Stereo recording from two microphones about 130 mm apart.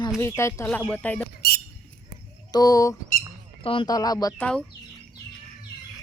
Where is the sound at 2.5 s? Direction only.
30° left (ahead or behind).